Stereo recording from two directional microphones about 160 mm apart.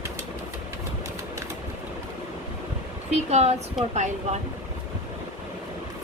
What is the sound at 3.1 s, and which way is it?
Speech, 40° right (ahead or behind).